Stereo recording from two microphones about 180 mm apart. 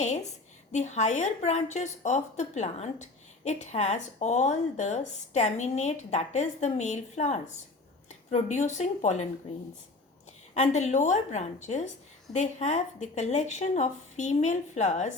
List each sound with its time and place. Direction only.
0.7 s a woman's voice: 40° left (ahead or behind)
10.5 s a woman's voice: 40° left (ahead or behind)